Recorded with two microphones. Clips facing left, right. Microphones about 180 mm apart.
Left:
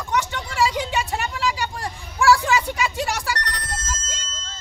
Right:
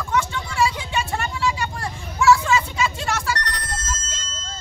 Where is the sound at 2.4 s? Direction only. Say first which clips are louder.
Even; 15° left (ahead or behind).